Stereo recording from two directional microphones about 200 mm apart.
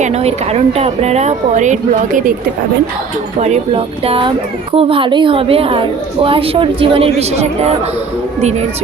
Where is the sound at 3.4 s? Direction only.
35° right (ahead or behind).